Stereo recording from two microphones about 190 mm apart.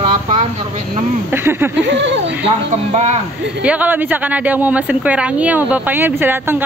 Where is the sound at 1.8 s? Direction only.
65° right (ahead or behind).